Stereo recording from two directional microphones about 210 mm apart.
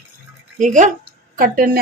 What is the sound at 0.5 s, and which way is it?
Speech, 35° right (ahead or behind).